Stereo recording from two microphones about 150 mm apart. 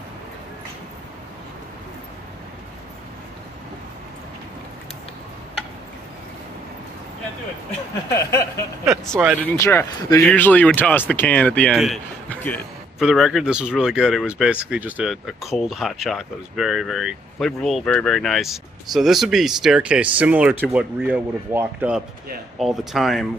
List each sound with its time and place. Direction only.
8.1 s a sound: 20° left (ahead or behind)
9.4 s speech: 15° left (ahead or behind)
9.9 s a sound: 25° left (ahead or behind)
10.3 s speech: 10° left (ahead or behind)
11.7 s speech: centre (ahead or behind)
12.3 s speech: 10° left (ahead or behind)
13.0 s speech: centre (ahead or behind)